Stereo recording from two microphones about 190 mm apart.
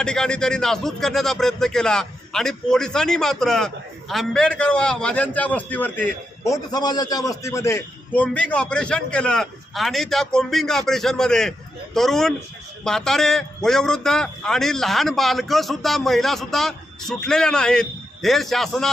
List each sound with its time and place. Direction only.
0.0 s a man's voice: 5° left (ahead or behind)